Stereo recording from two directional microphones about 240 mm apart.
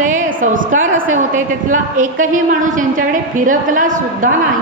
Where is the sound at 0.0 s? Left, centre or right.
Right.